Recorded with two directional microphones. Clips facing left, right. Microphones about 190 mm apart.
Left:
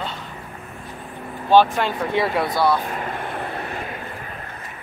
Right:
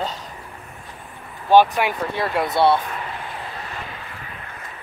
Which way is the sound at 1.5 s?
15° right (ahead or behind).